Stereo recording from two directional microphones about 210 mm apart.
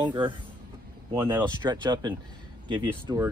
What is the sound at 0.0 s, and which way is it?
Speech, 20° right (ahead or behind).